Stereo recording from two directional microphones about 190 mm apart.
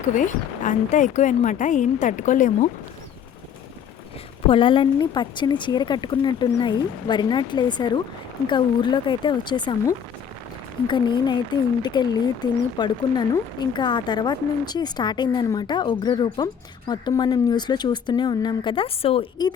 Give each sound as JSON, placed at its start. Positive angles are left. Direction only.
{"t": 0.0, "sound": "speech", "side_deg": 40}
{"t": 4.4, "sound": "speech", "side_deg": 25}